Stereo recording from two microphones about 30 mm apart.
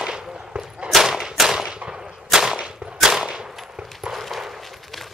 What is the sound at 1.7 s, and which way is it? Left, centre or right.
Gunshot, right.